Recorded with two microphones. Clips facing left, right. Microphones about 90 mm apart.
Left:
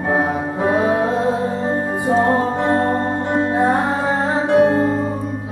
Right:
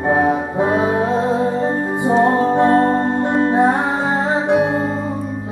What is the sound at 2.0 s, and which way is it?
Music, 20° right (ahead or behind).